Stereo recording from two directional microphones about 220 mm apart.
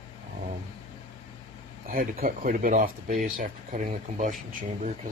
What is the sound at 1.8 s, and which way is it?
Speech, 40° right (ahead or behind).